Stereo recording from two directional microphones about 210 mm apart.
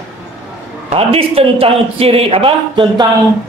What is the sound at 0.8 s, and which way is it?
A man's voice, 30° right (ahead or behind).